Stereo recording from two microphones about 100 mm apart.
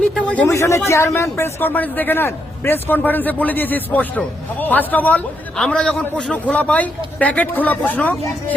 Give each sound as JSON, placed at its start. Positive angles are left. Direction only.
{"t": 0.4, "sound": "a man's voice", "side_deg": 30}